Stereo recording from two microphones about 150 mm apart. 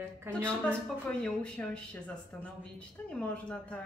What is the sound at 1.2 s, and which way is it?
Speech, 5° left (ahead or behind).